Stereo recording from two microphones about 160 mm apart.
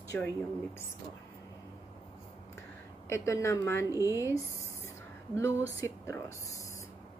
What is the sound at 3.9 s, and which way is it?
Speech, 20° right (ahead or behind).